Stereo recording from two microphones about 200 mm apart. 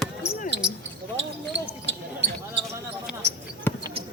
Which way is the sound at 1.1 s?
65° right (ahead or behind).